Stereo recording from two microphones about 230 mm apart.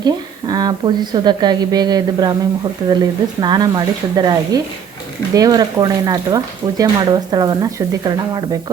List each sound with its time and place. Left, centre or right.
0.0 s speech: centre